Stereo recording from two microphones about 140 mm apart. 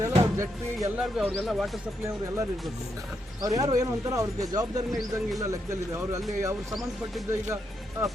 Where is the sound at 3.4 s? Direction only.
25° right (ahead or behind).